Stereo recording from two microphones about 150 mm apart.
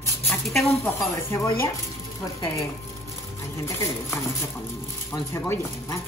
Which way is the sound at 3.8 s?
20° left (ahead or behind).